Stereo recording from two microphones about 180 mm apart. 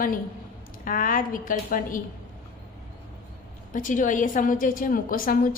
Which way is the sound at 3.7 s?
45° left (ahead or behind).